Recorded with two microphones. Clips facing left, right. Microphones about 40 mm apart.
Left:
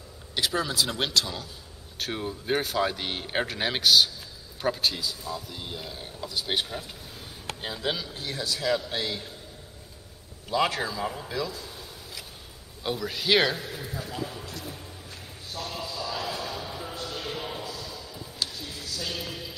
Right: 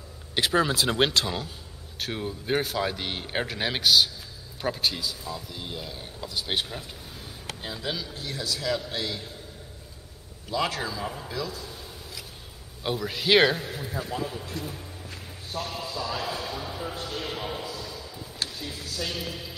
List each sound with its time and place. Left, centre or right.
0.3 s speech: right
2.0 s speech: centre
7.6 s speech: centre
8.2 s a man's voice: left
10.5 s a man's voice: centre
10.8 s speech: centre
12.8 s a man's voice: centre
14.6 s speech: right
15.8 s speech: right
16.4 s music: centre
16.9 s a sound: right
17.3 s a sound: centre
18.9 s a man's voice: centre